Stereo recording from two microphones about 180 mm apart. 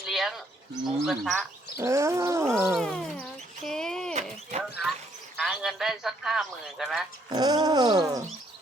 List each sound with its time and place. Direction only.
0.0 s a sound: centre (ahead or behind)
1.0 s a man's voice: centre (ahead or behind)
1.4 s speech: 15° right (ahead or behind)
2.7 s speech: centre (ahead or behind)
4.1 s a sound: 40° right (ahead or behind)
5.4 s a man's voice: centre (ahead or behind)
7.3 s cat: 20° right (ahead or behind)